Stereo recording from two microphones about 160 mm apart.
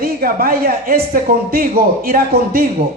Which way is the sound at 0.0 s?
70° right (ahead or behind).